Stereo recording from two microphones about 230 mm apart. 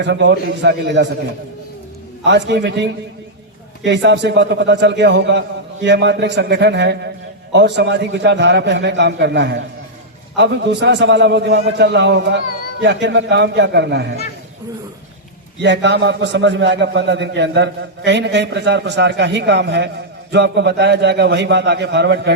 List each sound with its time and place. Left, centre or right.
0.0 s a man's voice: right
2.2 s a man's voice: right
15.6 s a man's voice: right